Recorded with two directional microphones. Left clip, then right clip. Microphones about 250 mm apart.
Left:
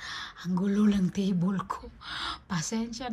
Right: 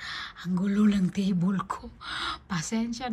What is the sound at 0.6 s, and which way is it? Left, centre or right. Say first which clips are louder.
Speech: right 1 dB; centre.